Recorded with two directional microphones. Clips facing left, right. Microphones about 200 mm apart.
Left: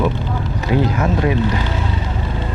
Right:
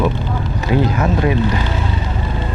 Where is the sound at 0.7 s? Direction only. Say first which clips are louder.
Right 1 dB; 15° right (ahead or behind).